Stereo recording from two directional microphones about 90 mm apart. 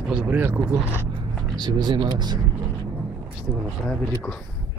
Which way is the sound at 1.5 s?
55° right (ahead or behind).